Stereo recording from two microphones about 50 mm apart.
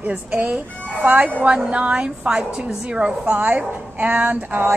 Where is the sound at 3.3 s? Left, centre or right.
Right.